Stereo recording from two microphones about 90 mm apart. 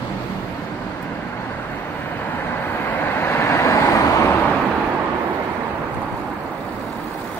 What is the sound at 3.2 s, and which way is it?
Vehicle, 25° left (ahead or behind).